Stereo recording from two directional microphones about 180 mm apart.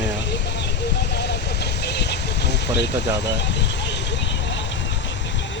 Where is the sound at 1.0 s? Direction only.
70° left (ahead or behind).